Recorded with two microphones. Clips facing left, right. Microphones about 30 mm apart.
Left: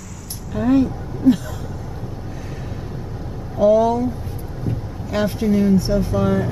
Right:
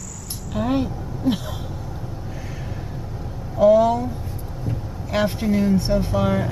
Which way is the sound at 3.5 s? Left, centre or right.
Centre.